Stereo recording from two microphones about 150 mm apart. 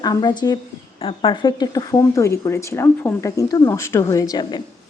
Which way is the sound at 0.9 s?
40° left (ahead or behind).